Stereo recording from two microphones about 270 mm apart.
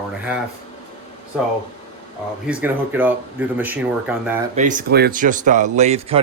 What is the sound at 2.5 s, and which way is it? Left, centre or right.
Speech, centre.